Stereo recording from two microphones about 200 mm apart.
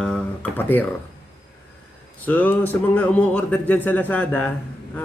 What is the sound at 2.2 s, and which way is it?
Speech, 10° left (ahead or behind).